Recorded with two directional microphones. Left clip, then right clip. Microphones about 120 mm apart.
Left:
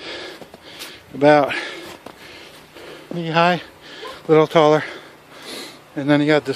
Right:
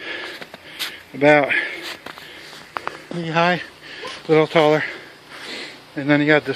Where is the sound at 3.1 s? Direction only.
30° left (ahead or behind).